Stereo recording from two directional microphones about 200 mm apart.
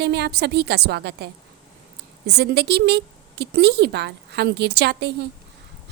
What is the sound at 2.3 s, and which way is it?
A woman's voice, 55° right (ahead or behind).